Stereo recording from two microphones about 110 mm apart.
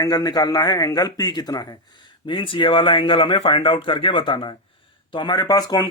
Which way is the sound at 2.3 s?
50° left (ahead or behind).